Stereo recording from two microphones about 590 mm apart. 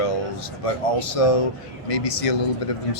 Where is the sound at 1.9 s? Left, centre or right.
Left.